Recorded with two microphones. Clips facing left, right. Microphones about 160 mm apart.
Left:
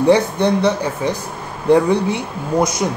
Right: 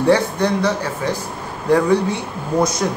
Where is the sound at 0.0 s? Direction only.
20° left (ahead or behind).